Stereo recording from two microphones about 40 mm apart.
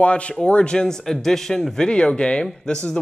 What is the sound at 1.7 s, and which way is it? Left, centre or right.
Speech, left.